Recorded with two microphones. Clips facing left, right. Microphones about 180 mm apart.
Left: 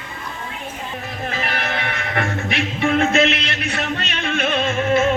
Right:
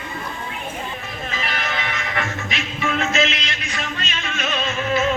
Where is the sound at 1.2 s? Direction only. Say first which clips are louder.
Left 3 dB; 60° left (ahead or behind).